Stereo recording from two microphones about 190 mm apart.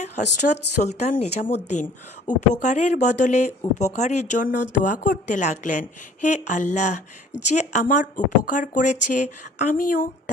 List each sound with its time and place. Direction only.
0.4 s a woman's voice: 40° left (ahead or behind)